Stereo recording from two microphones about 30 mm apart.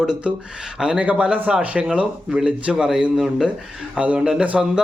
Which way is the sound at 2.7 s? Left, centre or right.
Centre.